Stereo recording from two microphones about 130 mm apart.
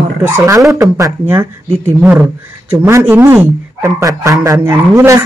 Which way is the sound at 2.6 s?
20° right (ahead or behind).